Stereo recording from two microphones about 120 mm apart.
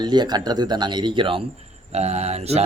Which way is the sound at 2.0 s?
65° right (ahead or behind).